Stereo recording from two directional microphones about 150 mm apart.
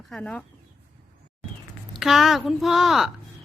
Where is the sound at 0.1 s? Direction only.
5° left (ahead or behind).